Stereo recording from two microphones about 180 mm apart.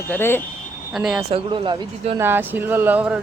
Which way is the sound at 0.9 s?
Centre (ahead or behind).